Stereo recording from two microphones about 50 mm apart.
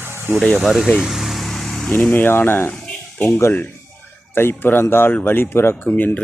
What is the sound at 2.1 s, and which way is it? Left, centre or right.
Speech, left.